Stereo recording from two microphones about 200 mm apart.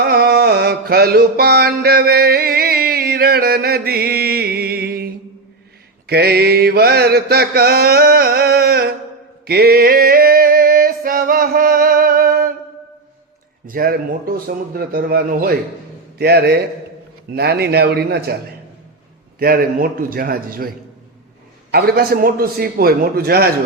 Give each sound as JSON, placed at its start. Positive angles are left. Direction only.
{"t": 0.0, "sound": "mantra", "side_deg": -50}
{"t": 9.5, "sound": "a sound", "side_deg": -50}
{"t": 13.7, "sound": "mantra", "side_deg": -45}
{"t": 19.4, "sound": "mantra", "side_deg": -45}